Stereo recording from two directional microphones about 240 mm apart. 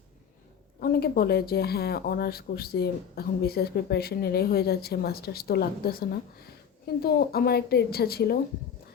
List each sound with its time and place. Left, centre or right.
0.8 s speech: left